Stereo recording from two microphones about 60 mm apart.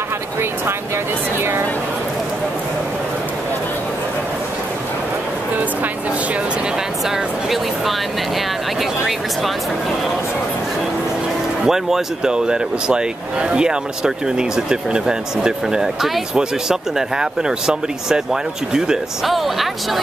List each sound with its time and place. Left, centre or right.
1.4 s speech: right
7.1 s speech: centre
11.6 s speech: centre